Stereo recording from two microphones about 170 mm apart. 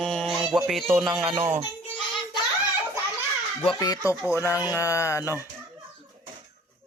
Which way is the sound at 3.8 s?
20° left (ahead or behind).